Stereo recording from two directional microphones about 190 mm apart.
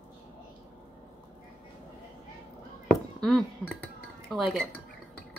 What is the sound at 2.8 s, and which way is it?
Chink, centre (ahead or behind).